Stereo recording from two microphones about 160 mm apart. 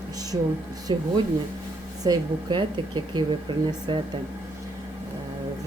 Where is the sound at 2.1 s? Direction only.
30° right (ahead or behind).